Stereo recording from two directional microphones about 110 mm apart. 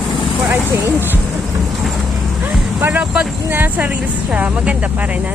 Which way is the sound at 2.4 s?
15° right (ahead or behind).